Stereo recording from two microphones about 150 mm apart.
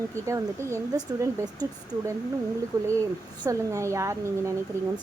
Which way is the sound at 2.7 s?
20° right (ahead or behind).